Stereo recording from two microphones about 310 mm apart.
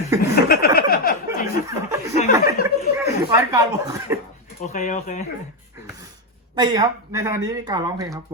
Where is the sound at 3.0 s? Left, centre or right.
Centre.